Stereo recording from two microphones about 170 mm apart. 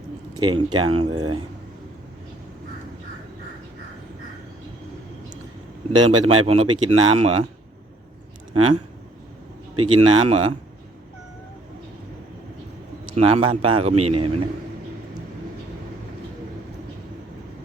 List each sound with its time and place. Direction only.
0.3 s speech: 25° right (ahead or behind)
6.1 s speech: 35° right (ahead or behind)
9.7 s speech: 30° right (ahead or behind)
13.1 s speech: 35° right (ahead or behind)